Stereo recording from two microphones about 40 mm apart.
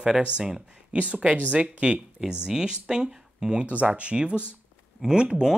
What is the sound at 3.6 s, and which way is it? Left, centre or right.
Speech, right.